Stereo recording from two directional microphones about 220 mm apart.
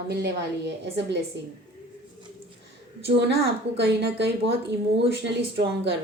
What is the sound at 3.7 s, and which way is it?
Speech, 50° right (ahead or behind).